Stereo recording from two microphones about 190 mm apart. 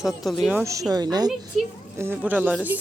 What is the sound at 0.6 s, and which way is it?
Speech, 15° right (ahead or behind).